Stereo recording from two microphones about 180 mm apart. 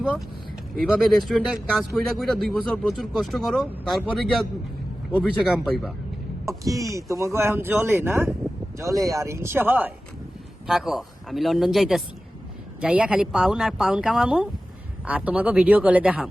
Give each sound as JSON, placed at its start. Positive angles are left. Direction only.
{"t": 0.8, "sound": "speech", "side_deg": 0}
{"t": 6.4, "sound": "speech", "side_deg": -20}